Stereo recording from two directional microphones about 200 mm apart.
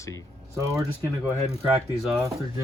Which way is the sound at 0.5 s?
15° right (ahead or behind).